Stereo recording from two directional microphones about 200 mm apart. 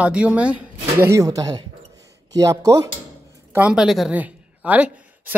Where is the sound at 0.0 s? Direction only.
5° right (ahead or behind).